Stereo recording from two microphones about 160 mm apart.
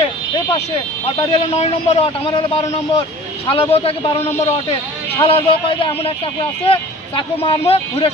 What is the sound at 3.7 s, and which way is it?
Speech, 35° left (ahead or behind).